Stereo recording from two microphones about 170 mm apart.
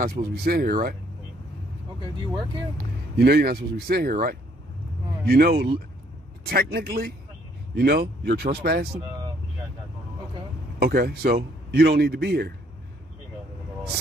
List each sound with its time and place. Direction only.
0.0 s speech: 65° right (ahead or behind)
2.8 s speech: 65° right (ahead or behind)
10.8 s a man's voice: 65° right (ahead or behind)